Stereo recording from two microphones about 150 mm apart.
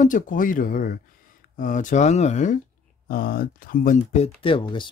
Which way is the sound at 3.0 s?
70° left (ahead or behind).